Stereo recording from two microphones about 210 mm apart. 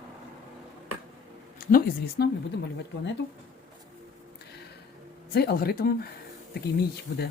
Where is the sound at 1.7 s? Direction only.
45° left (ahead or behind).